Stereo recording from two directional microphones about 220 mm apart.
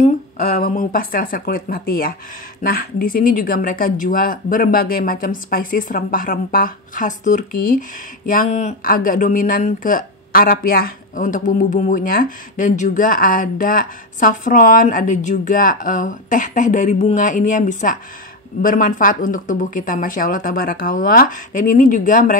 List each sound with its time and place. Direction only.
0.0 s speech: 40° left (ahead or behind)